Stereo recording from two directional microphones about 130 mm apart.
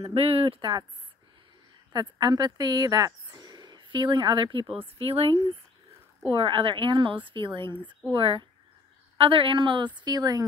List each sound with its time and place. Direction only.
0.0 s speech: 50° right (ahead or behind)
1.9 s speech: 30° right (ahead or behind)